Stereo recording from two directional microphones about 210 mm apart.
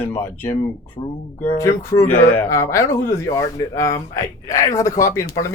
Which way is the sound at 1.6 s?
15° left (ahead or behind).